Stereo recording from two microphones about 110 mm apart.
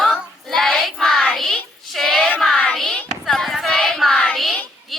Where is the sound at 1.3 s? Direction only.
Centre (ahead or behind).